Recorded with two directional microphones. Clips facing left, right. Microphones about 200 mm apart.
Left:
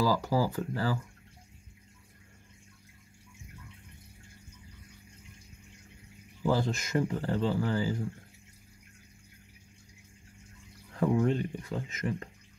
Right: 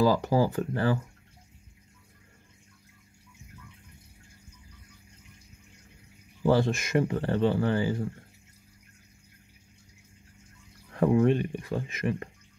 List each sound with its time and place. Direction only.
0.0 s speech: 20° right (ahead or behind)
0.6 s speech: 60° right (ahead or behind)
6.4 s speech: 60° right (ahead or behind)
11.2 s speech: 65° right (ahead or behind)